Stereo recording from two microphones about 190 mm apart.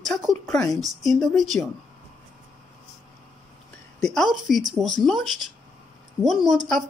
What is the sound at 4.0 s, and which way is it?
A woman's voice, centre (ahead or behind).